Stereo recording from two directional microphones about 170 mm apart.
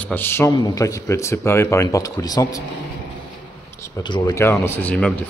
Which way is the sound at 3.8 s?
25° left (ahead or behind).